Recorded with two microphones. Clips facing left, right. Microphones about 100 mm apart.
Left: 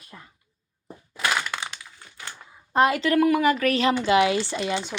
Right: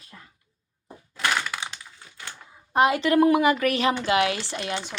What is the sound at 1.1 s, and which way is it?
Crushing, 5° left (ahead or behind).